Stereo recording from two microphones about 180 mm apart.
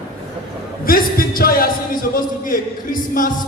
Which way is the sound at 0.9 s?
55° left (ahead or behind).